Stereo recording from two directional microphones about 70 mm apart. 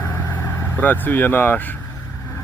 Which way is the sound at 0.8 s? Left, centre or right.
Left.